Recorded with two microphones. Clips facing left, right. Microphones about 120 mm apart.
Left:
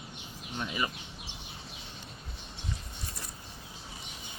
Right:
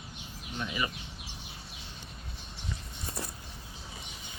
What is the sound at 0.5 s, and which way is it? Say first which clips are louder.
Speech: even; 25° left (ahead or behind).